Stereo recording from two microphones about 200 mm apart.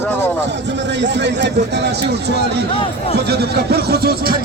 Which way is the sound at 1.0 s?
60° right (ahead or behind).